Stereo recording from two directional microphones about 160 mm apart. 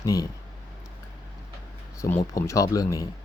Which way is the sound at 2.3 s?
20° left (ahead or behind).